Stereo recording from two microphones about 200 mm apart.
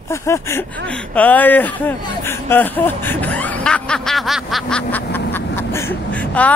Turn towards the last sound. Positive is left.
turn(degrees=5)  # may be behind; listen again after turning